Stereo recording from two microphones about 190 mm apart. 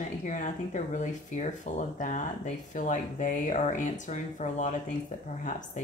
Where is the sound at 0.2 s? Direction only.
40° left (ahead or behind).